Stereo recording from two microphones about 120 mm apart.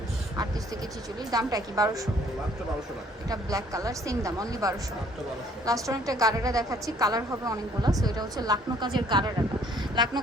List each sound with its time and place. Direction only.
1.3 s a woman's voice: 30° right (ahead or behind)
3.2 s a woman's voice: 30° right (ahead or behind)